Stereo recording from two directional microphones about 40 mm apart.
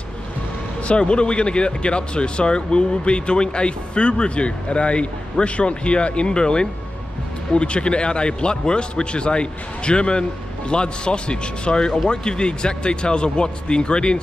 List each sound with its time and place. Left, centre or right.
0.8 s speech: left